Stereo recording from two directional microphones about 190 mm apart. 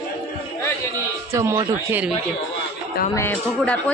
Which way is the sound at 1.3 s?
15° right (ahead or behind).